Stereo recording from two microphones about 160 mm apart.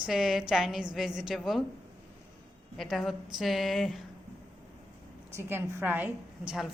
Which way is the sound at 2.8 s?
Centre (ahead or behind).